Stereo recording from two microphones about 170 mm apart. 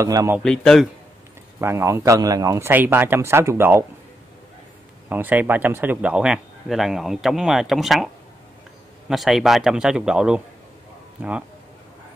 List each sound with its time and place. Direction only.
0.0 s a man's voice: 20° right (ahead or behind)
0.4 s speech: 5° left (ahead or behind)
1.6 s a man's voice: 15° right (ahead or behind)
5.1 s speech: 10° right (ahead or behind)
9.1 s a man's voice: centre (ahead or behind)